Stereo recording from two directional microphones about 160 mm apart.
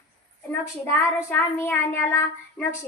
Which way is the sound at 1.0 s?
15° left (ahead or behind).